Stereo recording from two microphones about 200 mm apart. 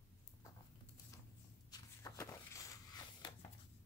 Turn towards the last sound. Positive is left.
turn(degrees=20)  # may be behind; listen again after turning